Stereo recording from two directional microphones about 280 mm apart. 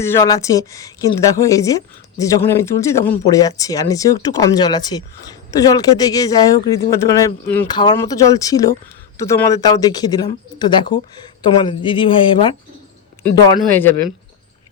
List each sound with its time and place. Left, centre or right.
0.0 s speech: centre